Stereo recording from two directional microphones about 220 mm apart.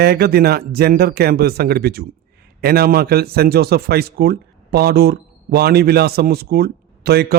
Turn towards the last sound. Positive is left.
turn(degrees=-45)  # may be behind; listen again after turning